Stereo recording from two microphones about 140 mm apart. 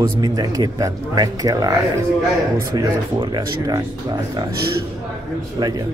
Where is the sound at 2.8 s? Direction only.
30° right (ahead or behind).